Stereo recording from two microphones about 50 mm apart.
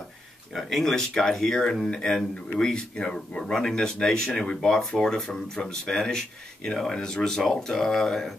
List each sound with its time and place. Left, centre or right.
0.6 s speech: centre